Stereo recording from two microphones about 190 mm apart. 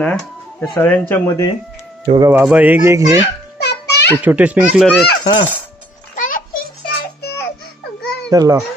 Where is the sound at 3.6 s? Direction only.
60° left (ahead or behind).